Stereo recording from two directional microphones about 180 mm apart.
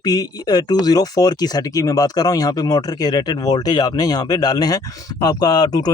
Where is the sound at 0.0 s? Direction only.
20° left (ahead or behind).